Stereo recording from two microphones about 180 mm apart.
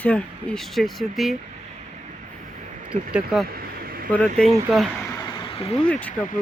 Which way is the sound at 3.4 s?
60° right (ahead or behind).